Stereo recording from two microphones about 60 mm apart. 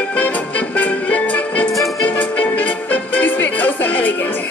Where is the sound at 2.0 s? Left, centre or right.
Left.